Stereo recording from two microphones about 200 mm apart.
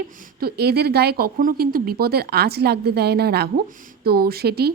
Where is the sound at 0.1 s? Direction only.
45° right (ahead or behind).